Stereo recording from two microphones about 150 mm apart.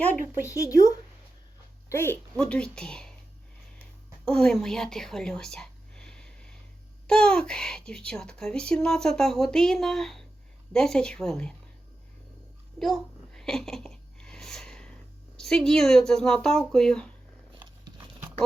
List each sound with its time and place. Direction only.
0.4 s speech: 20° left (ahead or behind)
1.9 s speech: 15° left (ahead or behind)
2.3 s speech: 5° left (ahead or behind)
4.3 s speech: 5° left (ahead or behind)
12.8 s a sound: centre (ahead or behind)
15.4 s speech: 5° left (ahead or behind)
17.6 s a sound: 30° right (ahead or behind)